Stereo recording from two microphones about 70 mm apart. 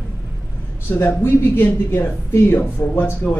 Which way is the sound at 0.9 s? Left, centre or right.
Left.